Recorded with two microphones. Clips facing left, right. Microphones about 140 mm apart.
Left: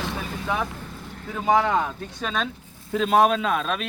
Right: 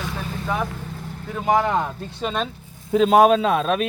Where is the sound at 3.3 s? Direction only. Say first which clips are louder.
Right 5 dB; 40° right (ahead or behind).